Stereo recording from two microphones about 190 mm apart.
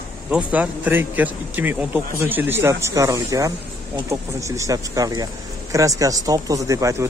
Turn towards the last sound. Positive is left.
turn(degrees=-15)  # may be behind; listen again after turning